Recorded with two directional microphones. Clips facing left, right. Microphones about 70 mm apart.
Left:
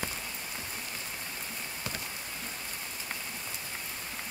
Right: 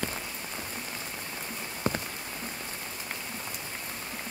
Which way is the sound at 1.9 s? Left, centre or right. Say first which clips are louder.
Right 11 dB; right.